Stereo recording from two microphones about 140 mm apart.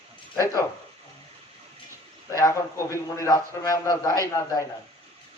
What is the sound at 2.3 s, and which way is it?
A man's voice, 20° left (ahead or behind).